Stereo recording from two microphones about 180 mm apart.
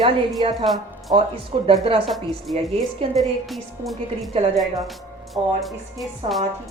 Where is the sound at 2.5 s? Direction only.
35° right (ahead or behind).